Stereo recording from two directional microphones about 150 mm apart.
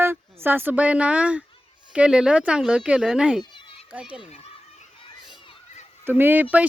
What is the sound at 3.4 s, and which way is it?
Children playing, 35° left (ahead or behind).